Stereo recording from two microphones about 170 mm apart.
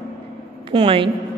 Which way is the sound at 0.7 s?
30° right (ahead or behind).